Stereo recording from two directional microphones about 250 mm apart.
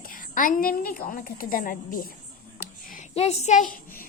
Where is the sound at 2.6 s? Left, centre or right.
Left.